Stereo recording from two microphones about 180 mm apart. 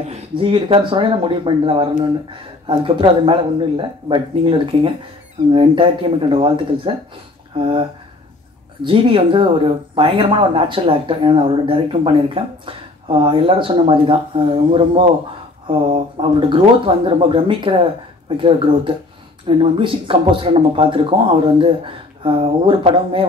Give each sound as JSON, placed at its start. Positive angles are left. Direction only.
{"t": 0.1, "sound": "speech", "side_deg": -30}
{"t": 8.8, "sound": "speech", "side_deg": -30}
{"t": 22.2, "sound": "speech", "side_deg": -30}